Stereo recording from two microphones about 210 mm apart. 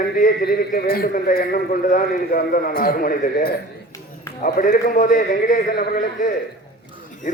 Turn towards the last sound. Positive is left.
turn(degrees=35)  # may be behind; listen again after turning